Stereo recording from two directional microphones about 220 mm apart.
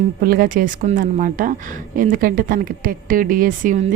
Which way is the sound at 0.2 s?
40° right (ahead or behind).